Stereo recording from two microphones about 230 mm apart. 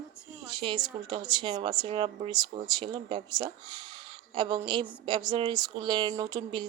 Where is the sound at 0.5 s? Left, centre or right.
Centre.